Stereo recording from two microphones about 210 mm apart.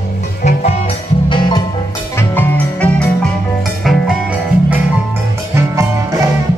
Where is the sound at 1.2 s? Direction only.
20° left (ahead or behind).